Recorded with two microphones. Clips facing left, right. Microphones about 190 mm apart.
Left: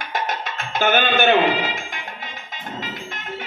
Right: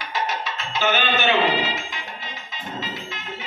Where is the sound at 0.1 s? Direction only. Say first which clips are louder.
Left 1 dB; 50° left (ahead or behind).